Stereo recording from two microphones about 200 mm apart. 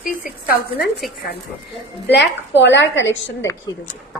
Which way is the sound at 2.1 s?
60° left (ahead or behind).